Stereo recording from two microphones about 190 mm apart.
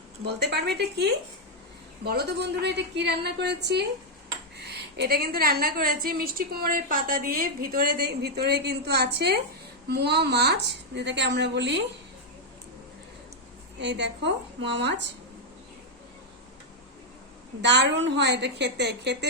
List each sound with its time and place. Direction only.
0.3 s a woman's voice: 60° right (ahead or behind)
13.7 s a woman's voice: 65° right (ahead or behind)
17.6 s a woman's voice: 65° right (ahead or behind)